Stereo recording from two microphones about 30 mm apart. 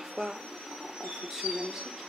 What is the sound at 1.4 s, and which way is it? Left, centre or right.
Speech, right.